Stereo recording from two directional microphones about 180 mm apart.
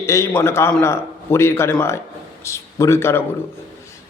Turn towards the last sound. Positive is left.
turn(degrees=15)  # may be behind; listen again after turning